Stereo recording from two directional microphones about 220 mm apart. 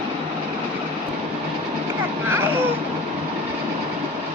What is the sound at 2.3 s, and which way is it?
Vehicle, 10° right (ahead or behind).